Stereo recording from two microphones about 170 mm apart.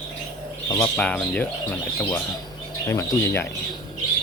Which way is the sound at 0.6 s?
20° left (ahead or behind).